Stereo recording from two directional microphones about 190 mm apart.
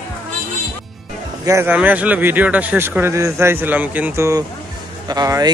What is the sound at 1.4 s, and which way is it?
Speech, 15° right (ahead or behind).